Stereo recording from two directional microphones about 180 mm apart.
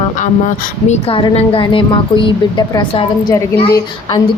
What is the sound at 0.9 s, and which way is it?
A woman's voice, 35° left (ahead or behind).